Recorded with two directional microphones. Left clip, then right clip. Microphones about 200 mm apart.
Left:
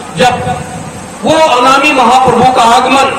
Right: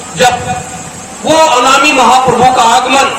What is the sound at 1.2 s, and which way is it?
A man's voice, 15° left (ahead or behind).